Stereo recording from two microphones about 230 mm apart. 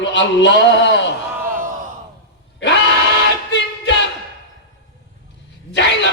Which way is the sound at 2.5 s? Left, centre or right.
Left.